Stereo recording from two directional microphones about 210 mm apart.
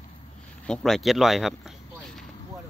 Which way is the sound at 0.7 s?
Centre (ahead or behind).